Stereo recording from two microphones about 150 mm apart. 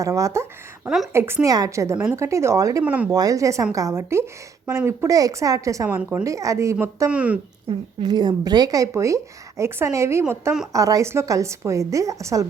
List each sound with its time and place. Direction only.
0.0 s a woman's voice: 20° right (ahead or behind)
0.9 s a woman's voice: centre (ahead or behind)
1.1 s a woman's voice: 15° right (ahead or behind)
2.8 s speech: 10° right (ahead or behind)
3.1 s a woman's voice: 25° right (ahead or behind)
6.0 s speech: 10° right (ahead or behind)
6.2 s a woman's voice: 20° right (ahead or behind)
8.0 s a woman's voice: 30° right (ahead or behind)